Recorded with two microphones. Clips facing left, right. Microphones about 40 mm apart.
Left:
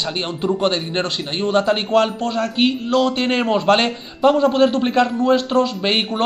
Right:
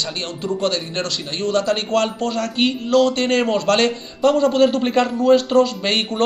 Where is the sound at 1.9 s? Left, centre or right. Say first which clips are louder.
Left 2 dB; centre.